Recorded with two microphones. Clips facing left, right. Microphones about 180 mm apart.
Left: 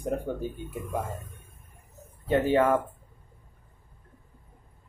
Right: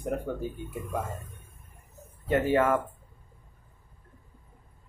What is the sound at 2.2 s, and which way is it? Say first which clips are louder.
Speech: left 1 dB; 20° left (ahead or behind).